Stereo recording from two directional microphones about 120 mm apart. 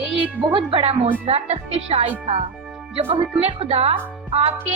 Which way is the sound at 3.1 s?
60° right (ahead or behind).